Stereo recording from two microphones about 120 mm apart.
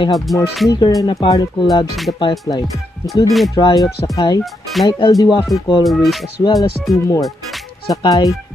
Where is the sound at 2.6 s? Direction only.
Centre (ahead or behind).